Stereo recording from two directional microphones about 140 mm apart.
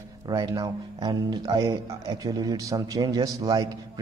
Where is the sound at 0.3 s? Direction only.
25° right (ahead or behind).